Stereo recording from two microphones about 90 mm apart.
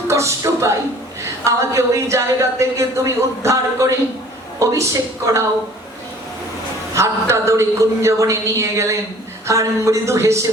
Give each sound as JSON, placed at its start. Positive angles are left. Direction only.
{"t": 0.1, "sound": "a man's voice", "side_deg": -35}
{"t": 6.9, "sound": "a woman's voice", "side_deg": -35}